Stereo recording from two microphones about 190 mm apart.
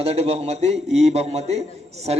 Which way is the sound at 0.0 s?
35° right (ahead or behind).